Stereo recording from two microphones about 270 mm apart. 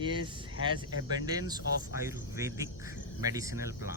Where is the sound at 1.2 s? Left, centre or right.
Centre.